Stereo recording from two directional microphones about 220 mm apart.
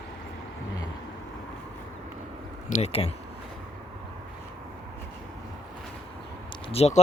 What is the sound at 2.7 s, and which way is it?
Speech, 30° left (ahead or behind).